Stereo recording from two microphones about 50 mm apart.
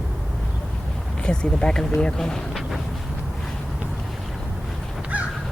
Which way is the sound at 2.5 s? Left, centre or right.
Centre.